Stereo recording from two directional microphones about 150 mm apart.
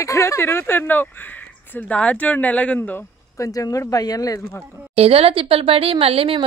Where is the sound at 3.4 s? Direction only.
20° left (ahead or behind).